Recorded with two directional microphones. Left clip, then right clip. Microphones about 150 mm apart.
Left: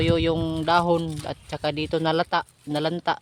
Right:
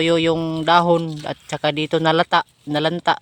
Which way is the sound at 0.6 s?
25° right (ahead or behind).